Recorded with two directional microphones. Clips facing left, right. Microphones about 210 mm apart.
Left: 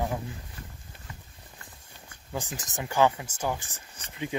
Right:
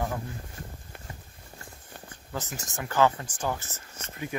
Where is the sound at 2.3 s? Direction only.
15° left (ahead or behind).